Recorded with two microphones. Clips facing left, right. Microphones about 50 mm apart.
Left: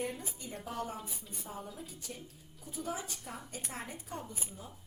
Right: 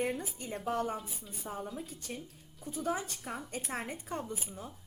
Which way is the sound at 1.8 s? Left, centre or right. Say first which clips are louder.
Right 4 dB; right.